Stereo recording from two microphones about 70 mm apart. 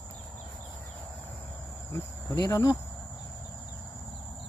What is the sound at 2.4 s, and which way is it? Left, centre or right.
Speech, left.